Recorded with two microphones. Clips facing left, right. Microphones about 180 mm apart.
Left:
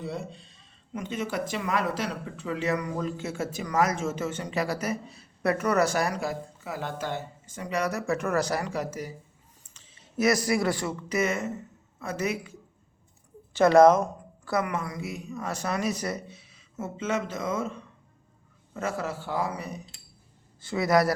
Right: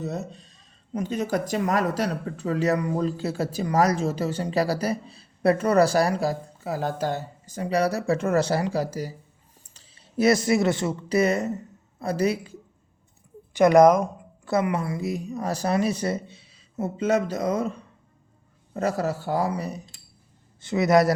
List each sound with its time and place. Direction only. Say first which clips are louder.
0.0 s speech: right 3 dB; 45° right (ahead or behind)
13.5 s speech: right 2 dB; 15° right (ahead or behind)
14.4 s speech: right 4 dB; 25° right (ahead or behind)
20.6 s a man's voice: right 4 dB; 20° right (ahead or behind)